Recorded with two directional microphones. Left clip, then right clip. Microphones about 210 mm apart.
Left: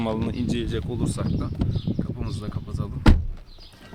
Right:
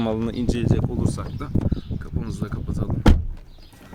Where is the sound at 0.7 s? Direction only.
15° right (ahead or behind).